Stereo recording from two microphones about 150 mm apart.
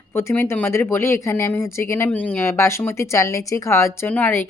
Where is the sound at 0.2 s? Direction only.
15° left (ahead or behind).